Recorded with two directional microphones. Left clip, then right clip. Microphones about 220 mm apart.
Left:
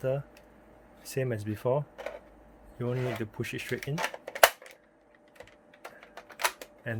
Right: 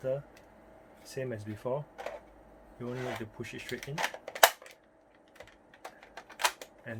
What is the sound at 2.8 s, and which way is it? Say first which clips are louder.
Speech: left 5 dB; 45° left (ahead or behind).